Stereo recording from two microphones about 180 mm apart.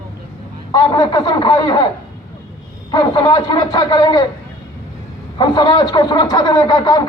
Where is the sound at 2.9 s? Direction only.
20° left (ahead or behind).